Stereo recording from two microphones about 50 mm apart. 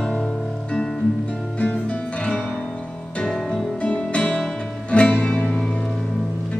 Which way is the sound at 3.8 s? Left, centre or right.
Left.